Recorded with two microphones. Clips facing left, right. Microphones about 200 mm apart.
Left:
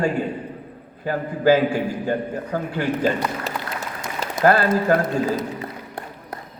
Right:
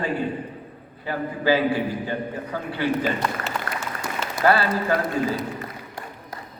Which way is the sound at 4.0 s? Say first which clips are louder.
Left 4 dB; 45° left (ahead or behind).